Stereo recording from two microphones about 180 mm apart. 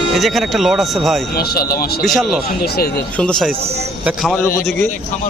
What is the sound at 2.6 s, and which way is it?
Speech, 60° left (ahead or behind).